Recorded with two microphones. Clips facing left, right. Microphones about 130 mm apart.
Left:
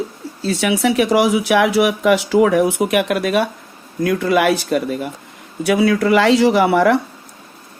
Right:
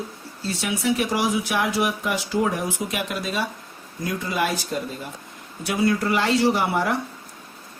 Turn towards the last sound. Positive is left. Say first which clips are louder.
# left 8 dB
turn(degrees=85)